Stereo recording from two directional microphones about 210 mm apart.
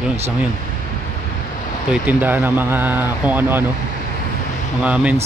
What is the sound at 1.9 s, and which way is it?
Speech, 10° right (ahead or behind).